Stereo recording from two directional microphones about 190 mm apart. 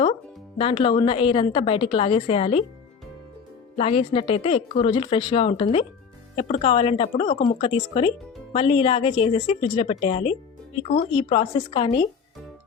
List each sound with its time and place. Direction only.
0.6 s a woman's voice: 30° left (ahead or behind)
3.8 s a woman's voice: 30° left (ahead or behind)